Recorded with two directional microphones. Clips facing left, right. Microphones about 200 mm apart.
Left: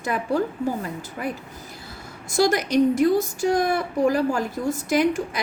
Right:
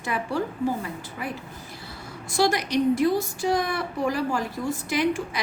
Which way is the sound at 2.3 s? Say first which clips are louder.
Left 3 dB; 45° left (ahead or behind).